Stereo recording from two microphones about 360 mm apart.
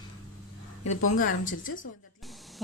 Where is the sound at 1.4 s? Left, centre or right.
Left.